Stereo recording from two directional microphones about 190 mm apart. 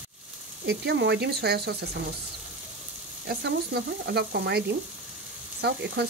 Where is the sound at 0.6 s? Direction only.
65° right (ahead or behind).